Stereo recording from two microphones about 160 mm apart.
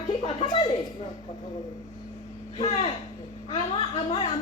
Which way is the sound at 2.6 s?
40° left (ahead or behind).